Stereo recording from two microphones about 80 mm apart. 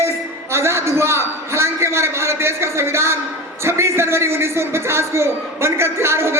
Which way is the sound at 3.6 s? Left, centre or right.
Right.